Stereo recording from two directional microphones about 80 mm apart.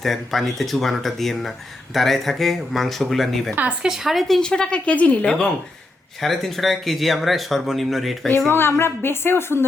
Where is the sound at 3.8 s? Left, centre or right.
Centre.